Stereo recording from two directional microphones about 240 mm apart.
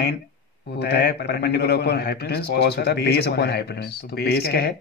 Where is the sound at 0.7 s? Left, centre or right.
Left.